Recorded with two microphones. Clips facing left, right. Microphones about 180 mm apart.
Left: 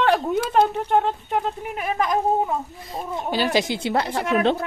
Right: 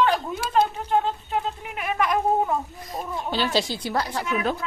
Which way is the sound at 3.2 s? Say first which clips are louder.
Left 3 dB; 10° left (ahead or behind).